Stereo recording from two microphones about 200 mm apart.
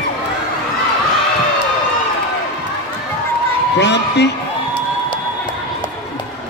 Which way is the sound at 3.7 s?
60° left (ahead or behind).